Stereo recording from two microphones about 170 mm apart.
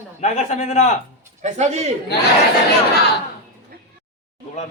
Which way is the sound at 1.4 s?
40° right (ahead or behind).